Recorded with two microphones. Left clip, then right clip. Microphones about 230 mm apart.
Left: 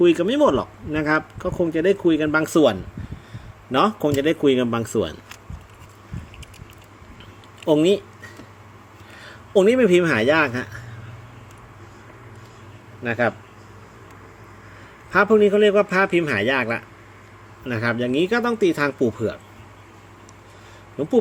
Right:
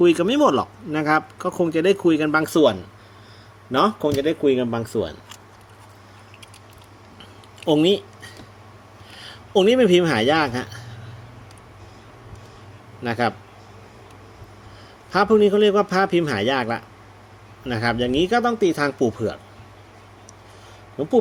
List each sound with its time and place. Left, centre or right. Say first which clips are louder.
0.0 s speech: even; centre
2.4 s speech: even; centre
7.6 s speech: even; centre
13.0 s speech: left 1 dB; centre
15.3 s speech: even; centre